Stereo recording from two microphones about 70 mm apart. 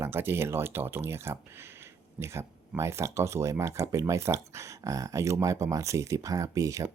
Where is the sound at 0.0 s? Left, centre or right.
Right.